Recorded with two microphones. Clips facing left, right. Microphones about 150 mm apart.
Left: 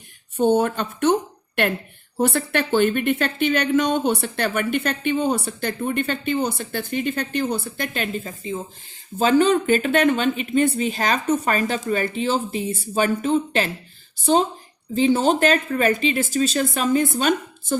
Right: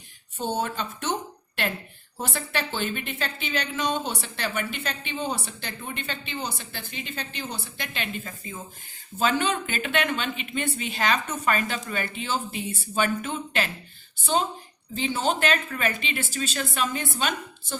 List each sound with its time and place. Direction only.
0.3 s speech: 55° left (ahead or behind)
2.1 s speech: 60° left (ahead or behind)
8.2 s speech: 30° left (ahead or behind)
14.9 s speech: 40° left (ahead or behind)